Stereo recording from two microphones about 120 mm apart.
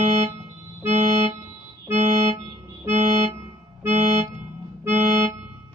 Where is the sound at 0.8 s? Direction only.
15° right (ahead or behind).